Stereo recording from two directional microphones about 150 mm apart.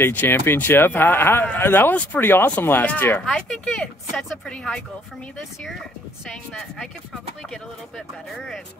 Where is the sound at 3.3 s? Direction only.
Centre (ahead or behind).